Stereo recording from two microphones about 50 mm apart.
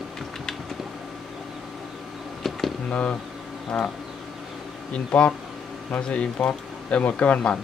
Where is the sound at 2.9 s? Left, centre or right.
Left.